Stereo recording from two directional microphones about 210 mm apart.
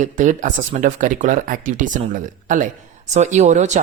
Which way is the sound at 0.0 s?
35° right (ahead or behind).